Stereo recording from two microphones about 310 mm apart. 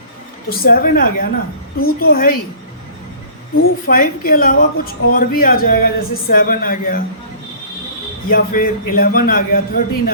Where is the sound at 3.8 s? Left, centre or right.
Left.